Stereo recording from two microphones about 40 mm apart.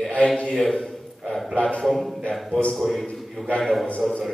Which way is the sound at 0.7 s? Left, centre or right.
Centre.